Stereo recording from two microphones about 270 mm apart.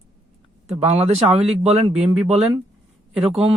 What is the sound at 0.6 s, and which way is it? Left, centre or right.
Speech, right.